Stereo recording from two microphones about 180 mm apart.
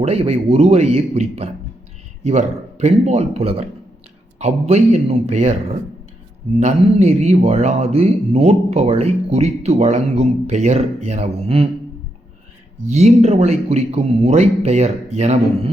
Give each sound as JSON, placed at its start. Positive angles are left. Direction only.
{"t": 0.0, "sound": "a man's voice", "side_deg": -35}
{"t": 12.9, "sound": "a man's voice", "side_deg": -35}